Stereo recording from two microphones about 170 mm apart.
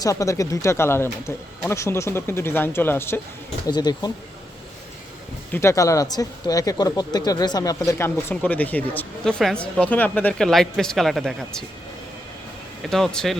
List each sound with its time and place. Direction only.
0.0 s speech: 20° left (ahead or behind)
3.7 s speech: 25° left (ahead or behind)
5.5 s speech: 15° left (ahead or behind)
12.8 s speech: centre (ahead or behind)